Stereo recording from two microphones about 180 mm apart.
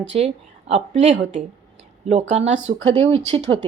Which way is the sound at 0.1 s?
40° right (ahead or behind).